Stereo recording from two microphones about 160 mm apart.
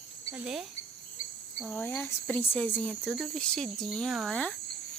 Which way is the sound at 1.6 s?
10° left (ahead or behind).